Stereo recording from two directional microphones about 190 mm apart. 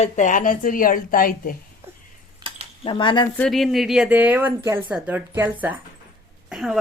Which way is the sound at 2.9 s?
25° left (ahead or behind).